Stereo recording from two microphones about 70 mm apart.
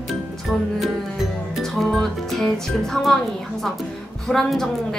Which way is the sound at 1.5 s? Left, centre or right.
Centre.